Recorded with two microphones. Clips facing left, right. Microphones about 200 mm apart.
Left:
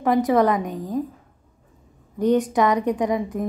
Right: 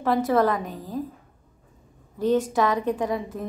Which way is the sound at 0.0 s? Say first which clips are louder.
Left 3 dB; 15° left (ahead or behind).